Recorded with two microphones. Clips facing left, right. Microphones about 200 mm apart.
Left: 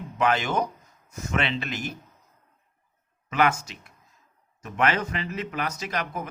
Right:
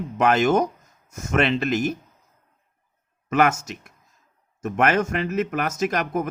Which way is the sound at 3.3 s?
45° right (ahead or behind).